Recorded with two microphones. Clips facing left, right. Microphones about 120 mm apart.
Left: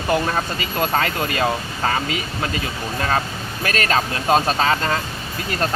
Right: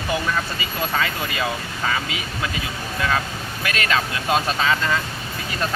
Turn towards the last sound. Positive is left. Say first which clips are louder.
# left 2 dB
turn(degrees=40)  # may be behind; listen again after turning